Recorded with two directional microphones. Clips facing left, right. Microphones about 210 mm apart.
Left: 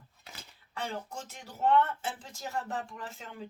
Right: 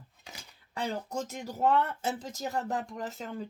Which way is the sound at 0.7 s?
40° right (ahead or behind).